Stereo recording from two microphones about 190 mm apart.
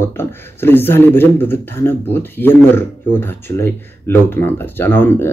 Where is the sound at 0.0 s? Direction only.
10° left (ahead or behind).